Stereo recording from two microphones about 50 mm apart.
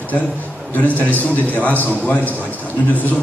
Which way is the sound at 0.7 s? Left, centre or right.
Left.